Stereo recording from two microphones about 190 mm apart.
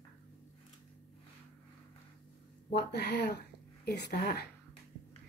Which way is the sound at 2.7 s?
60° left (ahead or behind).